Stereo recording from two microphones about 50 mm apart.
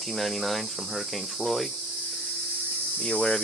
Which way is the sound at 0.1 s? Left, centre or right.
Centre.